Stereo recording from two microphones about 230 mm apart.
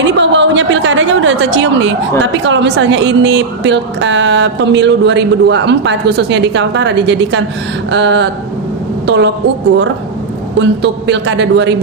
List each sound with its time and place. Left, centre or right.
0.1 s a woman's voice: right
10.6 s a woman's voice: right